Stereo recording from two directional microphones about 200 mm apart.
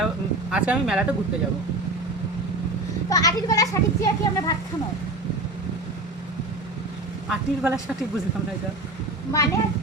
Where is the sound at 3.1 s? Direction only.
15° left (ahead or behind).